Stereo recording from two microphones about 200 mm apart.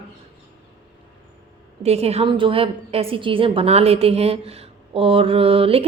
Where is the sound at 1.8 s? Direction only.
30° right (ahead or behind).